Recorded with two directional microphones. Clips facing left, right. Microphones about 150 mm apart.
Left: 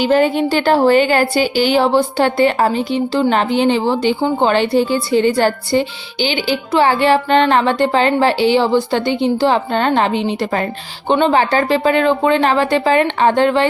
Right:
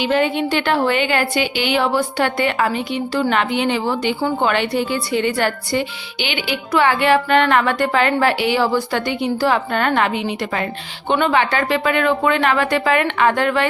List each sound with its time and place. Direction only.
0.0 s a woman's voice: 40° left (ahead or behind)